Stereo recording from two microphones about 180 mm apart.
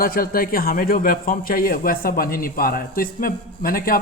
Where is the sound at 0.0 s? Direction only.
55° left (ahead or behind).